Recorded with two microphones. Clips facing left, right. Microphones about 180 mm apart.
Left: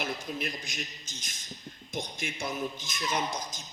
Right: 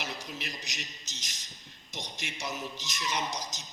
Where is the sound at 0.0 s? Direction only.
50° left (ahead or behind).